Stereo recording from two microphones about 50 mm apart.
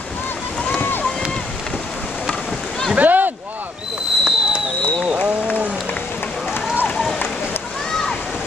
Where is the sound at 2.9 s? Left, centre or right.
Right.